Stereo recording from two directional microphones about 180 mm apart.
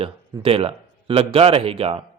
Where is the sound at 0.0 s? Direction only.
30° right (ahead or behind).